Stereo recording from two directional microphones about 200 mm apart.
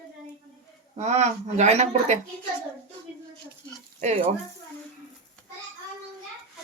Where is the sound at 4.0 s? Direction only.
30° right (ahead or behind).